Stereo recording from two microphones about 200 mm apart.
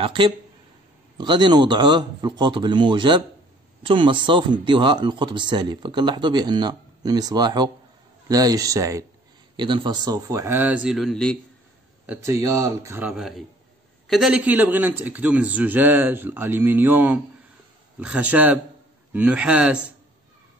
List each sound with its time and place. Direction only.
0.0 s a man's voice: 25° right (ahead or behind); by 11.3 s 5° left (ahead or behind)
12.1 s a man's voice: 15° right (ahead or behind)